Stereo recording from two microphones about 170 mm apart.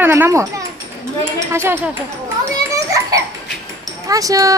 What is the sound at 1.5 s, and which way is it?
Speech, 15° right (ahead or behind).